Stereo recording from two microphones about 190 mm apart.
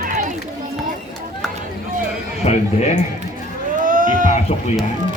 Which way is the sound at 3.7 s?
45° right (ahead or behind).